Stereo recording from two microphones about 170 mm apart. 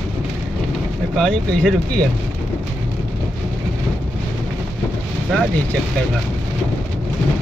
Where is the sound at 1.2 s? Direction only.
5° left (ahead or behind).